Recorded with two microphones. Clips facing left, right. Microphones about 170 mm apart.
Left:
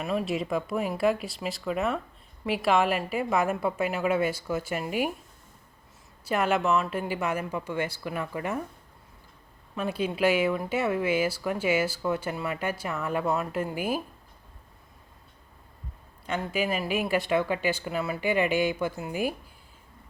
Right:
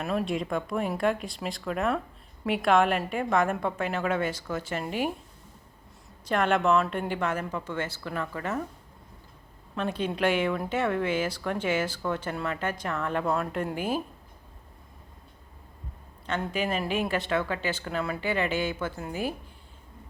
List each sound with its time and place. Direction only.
0.0 s speech: centre (ahead or behind)
6.2 s speech: 5° left (ahead or behind)
9.7 s speech: 10° left (ahead or behind)
16.2 s speech: 10° left (ahead or behind)